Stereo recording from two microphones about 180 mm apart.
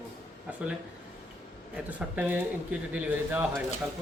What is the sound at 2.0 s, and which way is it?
Speech, 10° right (ahead or behind).